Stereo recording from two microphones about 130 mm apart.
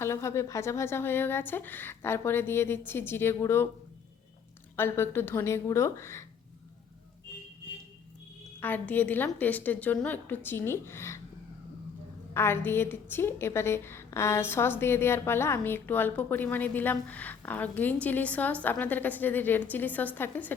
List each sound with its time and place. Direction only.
0.0 s a woman's voice: 20° left (ahead or behind)
4.8 s a woman's voice: 15° left (ahead or behind)
8.6 s a woman's voice: 15° left (ahead or behind)
12.3 s a woman's voice: 20° left (ahead or behind)